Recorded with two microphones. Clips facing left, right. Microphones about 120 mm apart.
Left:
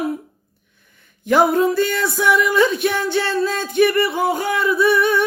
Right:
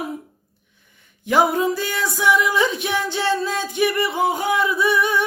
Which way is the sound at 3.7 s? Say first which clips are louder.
Left 5 dB; 15° right (ahead or behind).